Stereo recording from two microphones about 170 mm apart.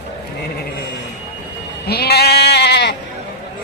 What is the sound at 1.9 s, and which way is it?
Sheep, 70° left (ahead or behind).